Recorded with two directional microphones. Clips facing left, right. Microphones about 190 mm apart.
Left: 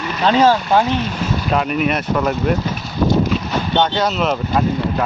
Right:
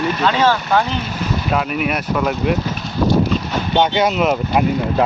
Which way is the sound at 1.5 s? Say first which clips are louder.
Left 2 dB; 5° right (ahead or behind).